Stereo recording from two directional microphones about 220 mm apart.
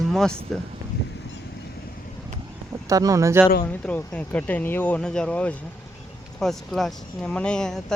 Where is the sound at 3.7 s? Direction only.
5° left (ahead or behind).